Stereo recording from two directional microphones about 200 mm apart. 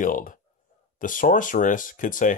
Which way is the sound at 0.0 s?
40° left (ahead or behind).